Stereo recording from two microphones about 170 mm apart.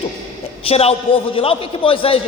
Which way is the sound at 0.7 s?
35° left (ahead or behind).